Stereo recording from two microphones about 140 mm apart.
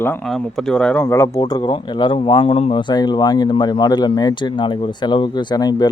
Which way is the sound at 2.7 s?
30° left (ahead or behind).